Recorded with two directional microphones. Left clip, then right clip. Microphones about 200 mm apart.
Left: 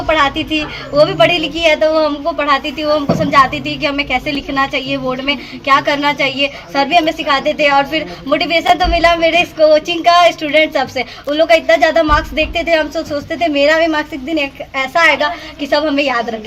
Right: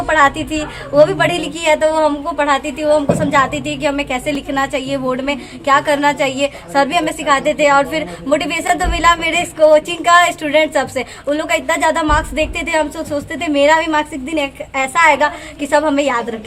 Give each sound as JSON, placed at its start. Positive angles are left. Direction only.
{"t": 0.1, "sound": "a woman's voice", "side_deg": 0}
{"t": 1.4, "sound": "speech", "side_deg": -40}
{"t": 1.8, "sound": "a woman's voice", "side_deg": 0}